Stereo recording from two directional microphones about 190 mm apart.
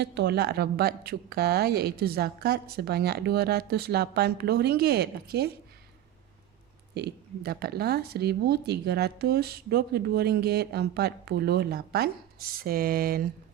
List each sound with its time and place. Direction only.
0.0 s speech: 60° right (ahead or behind)
6.9 s speech: 55° right (ahead or behind)